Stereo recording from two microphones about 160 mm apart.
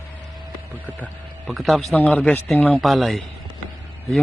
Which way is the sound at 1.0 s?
Centre (ahead or behind).